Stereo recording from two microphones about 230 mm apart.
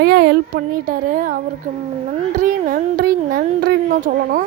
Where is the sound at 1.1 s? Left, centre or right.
Right.